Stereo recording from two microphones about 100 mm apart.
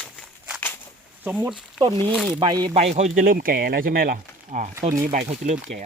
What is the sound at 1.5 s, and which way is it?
Speech, 5° right (ahead or behind).